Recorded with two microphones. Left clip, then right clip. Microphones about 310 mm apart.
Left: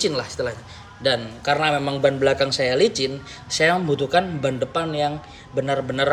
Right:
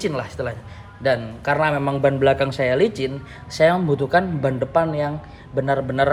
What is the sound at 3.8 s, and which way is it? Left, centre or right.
Speech, centre.